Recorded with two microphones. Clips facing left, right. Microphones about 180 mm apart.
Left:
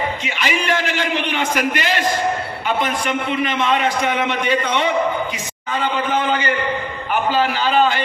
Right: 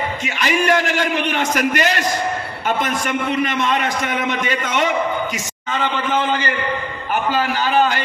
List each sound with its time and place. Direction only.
0.2 s a man's voice: 45° right (ahead or behind)
7.3 s a man's voice: 45° right (ahead or behind)